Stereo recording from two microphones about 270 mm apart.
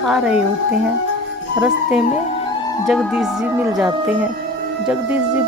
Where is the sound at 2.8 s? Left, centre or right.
Centre.